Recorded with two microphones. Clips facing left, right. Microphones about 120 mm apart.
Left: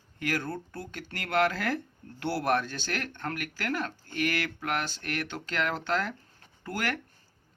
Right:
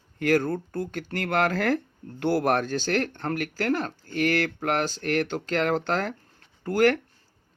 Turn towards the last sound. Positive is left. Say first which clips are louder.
# right 12 dB
turn(degrees=-45)  # may be behind; listen again after turning